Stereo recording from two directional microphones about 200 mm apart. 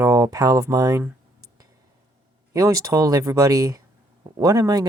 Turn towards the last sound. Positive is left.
turn(degrees=-20)  # may be behind; listen again after turning